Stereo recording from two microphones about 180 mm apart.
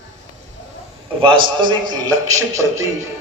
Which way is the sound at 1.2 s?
25° right (ahead or behind).